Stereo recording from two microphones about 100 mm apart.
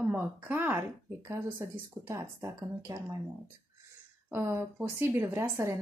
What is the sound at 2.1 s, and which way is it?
Speech, 30° right (ahead or behind).